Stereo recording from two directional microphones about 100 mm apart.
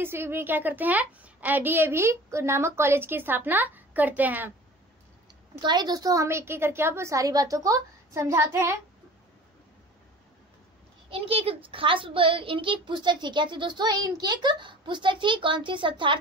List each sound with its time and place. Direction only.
0.0 s a woman's voice: 25° right (ahead or behind)
5.6 s a woman's voice: 45° right (ahead or behind); by 8.8 s 25° right (ahead or behind)
11.1 s a child's voice: 75° right (ahead or behind); by 16.2 s 55° right (ahead or behind)